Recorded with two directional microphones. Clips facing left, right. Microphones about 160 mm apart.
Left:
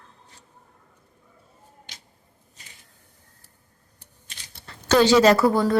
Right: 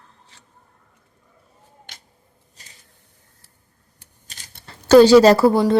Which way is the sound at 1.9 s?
55° right (ahead or behind).